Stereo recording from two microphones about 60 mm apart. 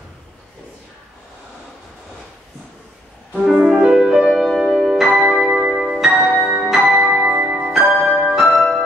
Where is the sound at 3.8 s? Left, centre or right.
Centre.